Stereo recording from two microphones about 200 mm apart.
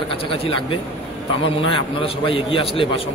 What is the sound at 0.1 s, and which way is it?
A man's voice, 25° left (ahead or behind).